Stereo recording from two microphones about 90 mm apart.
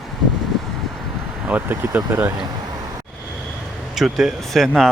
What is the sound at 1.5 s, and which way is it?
Speech, 20° right (ahead or behind).